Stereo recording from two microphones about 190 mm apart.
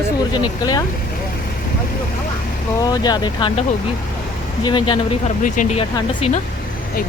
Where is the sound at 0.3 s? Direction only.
20° left (ahead or behind).